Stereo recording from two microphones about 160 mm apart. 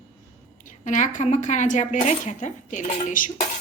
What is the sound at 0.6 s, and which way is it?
Speech, 50° left (ahead or behind).